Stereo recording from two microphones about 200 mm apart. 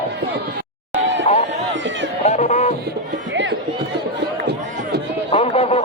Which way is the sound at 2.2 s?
35° left (ahead or behind).